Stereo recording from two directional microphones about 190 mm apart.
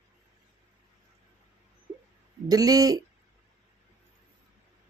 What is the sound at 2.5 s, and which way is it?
Speech, 20° right (ahead or behind).